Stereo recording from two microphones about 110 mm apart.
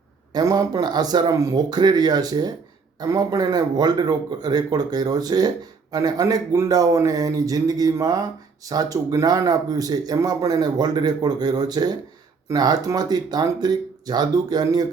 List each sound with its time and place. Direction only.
0.3 s speech: 35° right (ahead or behind)